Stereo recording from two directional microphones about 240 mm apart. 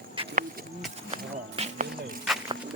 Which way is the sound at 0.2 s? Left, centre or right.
Right.